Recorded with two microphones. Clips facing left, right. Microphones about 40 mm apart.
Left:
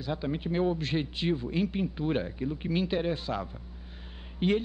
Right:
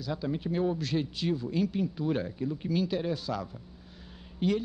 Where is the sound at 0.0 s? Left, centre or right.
Left.